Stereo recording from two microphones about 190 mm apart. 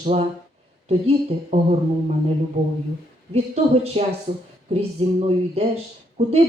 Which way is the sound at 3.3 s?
35° right (ahead or behind).